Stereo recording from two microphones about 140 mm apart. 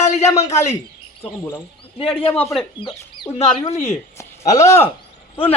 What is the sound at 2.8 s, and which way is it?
Speech, 35° left (ahead or behind).